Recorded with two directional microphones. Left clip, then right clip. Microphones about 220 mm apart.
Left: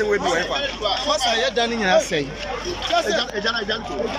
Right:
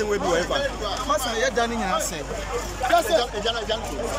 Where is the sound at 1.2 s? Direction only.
20° left (ahead or behind).